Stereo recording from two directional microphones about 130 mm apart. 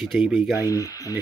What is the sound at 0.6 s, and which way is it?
Speech, 25° left (ahead or behind).